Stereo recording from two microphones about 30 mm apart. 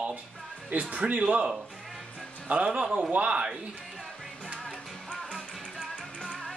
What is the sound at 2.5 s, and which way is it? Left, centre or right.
Speech, right.